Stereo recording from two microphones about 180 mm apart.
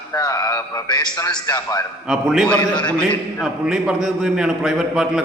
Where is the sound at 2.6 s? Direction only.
25° left (ahead or behind).